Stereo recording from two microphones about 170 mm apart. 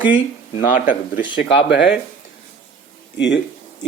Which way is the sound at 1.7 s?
85° left.